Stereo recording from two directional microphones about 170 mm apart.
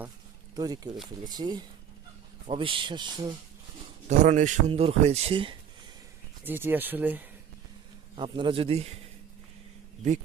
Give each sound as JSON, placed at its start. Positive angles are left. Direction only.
{"t": 0.5, "sound": "speech", "side_deg": -20}
{"t": 4.2, "sound": "speech", "side_deg": -45}
{"t": 6.4, "sound": "speech", "side_deg": -10}
{"t": 8.1, "sound": "speech", "side_deg": -30}